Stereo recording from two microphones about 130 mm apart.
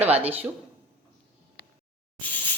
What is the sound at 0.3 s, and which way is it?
Speech, 15° right (ahead or behind).